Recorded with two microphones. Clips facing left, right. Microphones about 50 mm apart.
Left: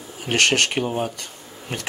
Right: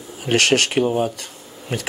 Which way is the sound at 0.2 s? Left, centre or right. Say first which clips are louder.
Right 2 dB; centre.